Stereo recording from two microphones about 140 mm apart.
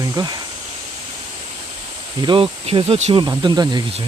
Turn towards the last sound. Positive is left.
turn(degrees=-30)  # may be behind; listen again after turning